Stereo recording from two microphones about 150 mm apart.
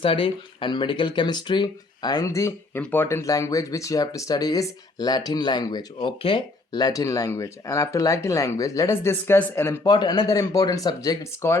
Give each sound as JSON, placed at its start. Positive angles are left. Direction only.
{"t": 0.0, "sound": "speech", "side_deg": 35}